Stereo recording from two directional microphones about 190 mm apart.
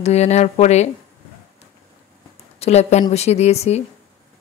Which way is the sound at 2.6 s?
35° left (ahead or behind).